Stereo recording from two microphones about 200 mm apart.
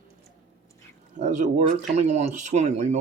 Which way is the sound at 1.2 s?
40° right (ahead or behind).